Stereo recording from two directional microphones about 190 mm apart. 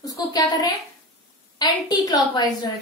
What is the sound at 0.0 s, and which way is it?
A woman's voice, 20° left (ahead or behind).